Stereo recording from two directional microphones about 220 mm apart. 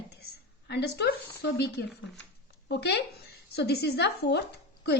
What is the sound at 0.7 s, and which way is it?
A woman's voice, 50° left (ahead or behind).